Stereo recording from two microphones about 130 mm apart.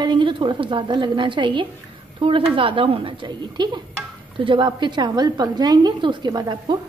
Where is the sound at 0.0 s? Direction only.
35° right (ahead or behind).